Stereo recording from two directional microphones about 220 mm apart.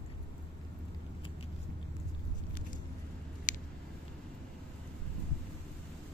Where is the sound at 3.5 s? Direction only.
35° left (ahead or behind).